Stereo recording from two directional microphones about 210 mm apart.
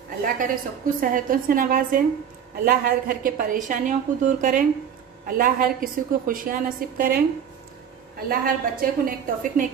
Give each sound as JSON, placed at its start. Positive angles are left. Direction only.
{"t": 0.2, "sound": "a woman's voice", "side_deg": -40}
{"t": 8.3, "sound": "a woman's voice", "side_deg": -45}